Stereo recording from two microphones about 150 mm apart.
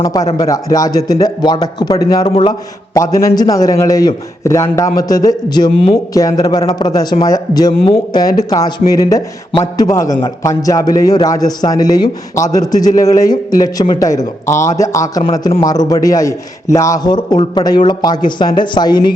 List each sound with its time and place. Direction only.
0.0 s a man's voice: 25° left (ahead or behind)
2.2 s a man's voice: 40° left (ahead or behind)
2.5 s a man's voice: 20° left (ahead or behind); by 6.0 s 35° left (ahead or behind)
6.1 s a man's voice: 25° left (ahead or behind)
7.7 s a man's voice: 35° left (ahead or behind)
9.5 s a man's voice: 35° left (ahead or behind)
9.8 s a man's voice: 20° left (ahead or behind)
15.2 s a man's voice: 35° left (ahead or behind)